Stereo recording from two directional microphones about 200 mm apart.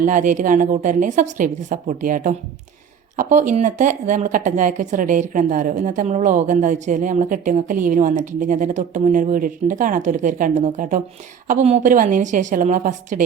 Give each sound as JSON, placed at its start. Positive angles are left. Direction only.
{"t": 0.0, "sound": "speech", "side_deg": -40}